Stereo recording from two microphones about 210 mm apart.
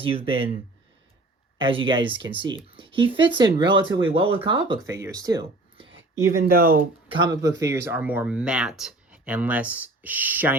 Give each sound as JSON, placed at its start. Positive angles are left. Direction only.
{"t": 0.0, "sound": "speech", "side_deg": -25}
{"t": 1.5, "sound": "speech", "side_deg": -25}
{"t": 6.4, "sound": "speech", "side_deg": -45}
{"t": 7.1, "sound": "speech", "side_deg": -20}